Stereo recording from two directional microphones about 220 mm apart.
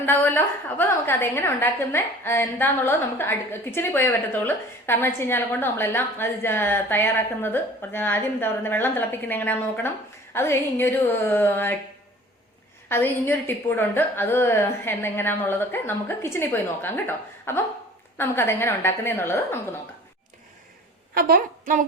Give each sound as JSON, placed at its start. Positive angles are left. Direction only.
{"t": 0.0, "sound": "a woman's voice", "side_deg": 10}
{"t": 12.9, "sound": "a woman's voice", "side_deg": 10}
{"t": 21.2, "sound": "a woman's voice", "side_deg": -40}